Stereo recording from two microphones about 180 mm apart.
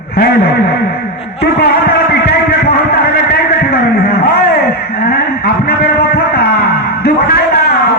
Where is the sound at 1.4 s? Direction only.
60° left (ahead or behind).